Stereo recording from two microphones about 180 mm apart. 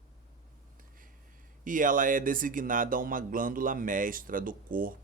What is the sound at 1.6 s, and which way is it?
Speech, 45° right (ahead or behind).